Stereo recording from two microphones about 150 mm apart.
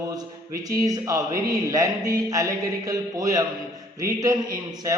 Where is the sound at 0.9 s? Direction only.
20° right (ahead or behind).